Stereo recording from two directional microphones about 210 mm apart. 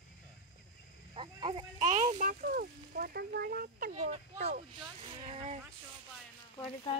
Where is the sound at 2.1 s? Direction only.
40° right (ahead or behind).